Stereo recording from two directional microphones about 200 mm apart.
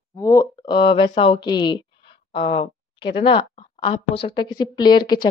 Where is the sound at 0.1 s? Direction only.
15° left (ahead or behind).